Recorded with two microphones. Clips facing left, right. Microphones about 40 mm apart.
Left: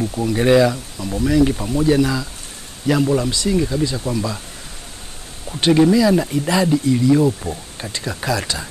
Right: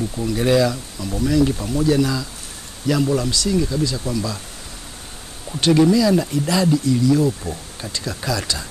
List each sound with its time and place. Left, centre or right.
0.0 s speech: centre
5.6 s speech: centre